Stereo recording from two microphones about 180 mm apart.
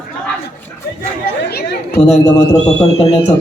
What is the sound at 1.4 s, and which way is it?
Chatter, 70° left (ahead or behind).